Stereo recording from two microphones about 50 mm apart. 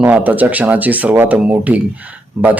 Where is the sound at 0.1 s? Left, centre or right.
Right.